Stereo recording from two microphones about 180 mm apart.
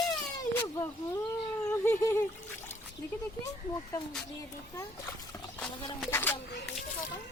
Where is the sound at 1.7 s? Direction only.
15° left (ahead or behind).